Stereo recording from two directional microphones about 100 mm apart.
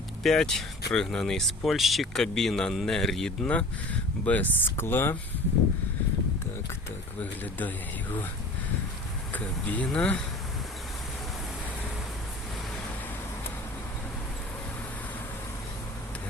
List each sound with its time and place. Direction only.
0.2 s speech: 5° left (ahead or behind); by 5.1 s 20° left (ahead or behind)
7.2 s speech: 15° left (ahead or behind)
9.3 s speech: 15° left (ahead or behind)